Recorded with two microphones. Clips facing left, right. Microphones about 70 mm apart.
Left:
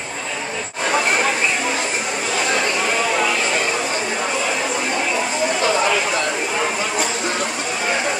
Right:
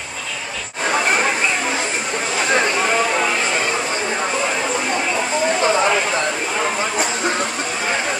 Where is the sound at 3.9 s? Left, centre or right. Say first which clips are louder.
Right 1 dB; right.